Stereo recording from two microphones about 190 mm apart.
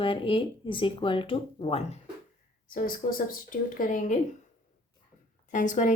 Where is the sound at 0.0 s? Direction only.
25° left (ahead or behind).